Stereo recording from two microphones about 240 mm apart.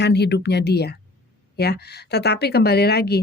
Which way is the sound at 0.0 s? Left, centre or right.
Left.